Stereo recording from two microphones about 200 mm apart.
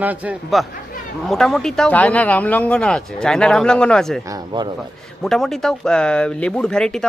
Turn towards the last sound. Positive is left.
turn(degrees=5)  # may be behind; listen again after turning